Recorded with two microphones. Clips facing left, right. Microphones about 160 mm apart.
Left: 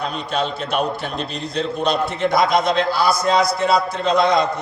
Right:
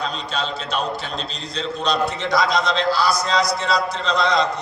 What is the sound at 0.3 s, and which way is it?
A man's voice, 55° left (ahead or behind).